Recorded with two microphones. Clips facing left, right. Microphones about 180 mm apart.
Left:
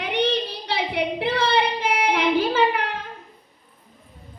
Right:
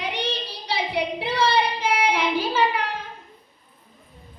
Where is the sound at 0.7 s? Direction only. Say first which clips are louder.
Even; 55° left (ahead or behind).